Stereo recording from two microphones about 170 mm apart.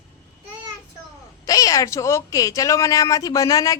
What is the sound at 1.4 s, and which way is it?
Speech, 20° left (ahead or behind).